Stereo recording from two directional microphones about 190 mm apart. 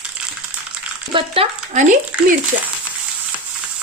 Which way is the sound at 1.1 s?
30° right (ahead or behind).